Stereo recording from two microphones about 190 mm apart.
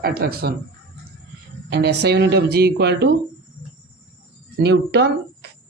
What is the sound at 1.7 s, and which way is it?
A man's voice, 60° right (ahead or behind).